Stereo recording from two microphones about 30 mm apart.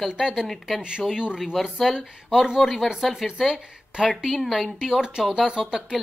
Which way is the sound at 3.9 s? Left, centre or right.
Right.